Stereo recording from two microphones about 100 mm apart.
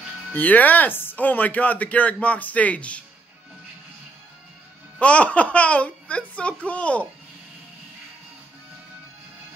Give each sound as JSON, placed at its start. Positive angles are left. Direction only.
{"t": 0.3, "sound": "speech", "side_deg": 15}
{"t": 4.9, "sound": "speech", "side_deg": 10}